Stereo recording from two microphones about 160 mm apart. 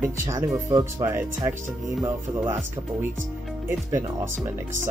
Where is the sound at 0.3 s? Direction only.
20° right (ahead or behind).